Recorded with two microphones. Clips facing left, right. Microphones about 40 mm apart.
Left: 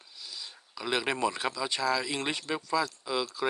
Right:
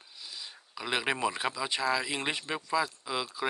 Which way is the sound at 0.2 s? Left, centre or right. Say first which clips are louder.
Left 1 dB; centre.